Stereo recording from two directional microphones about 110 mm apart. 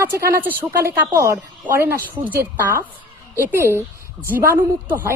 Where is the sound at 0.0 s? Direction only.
20° right (ahead or behind).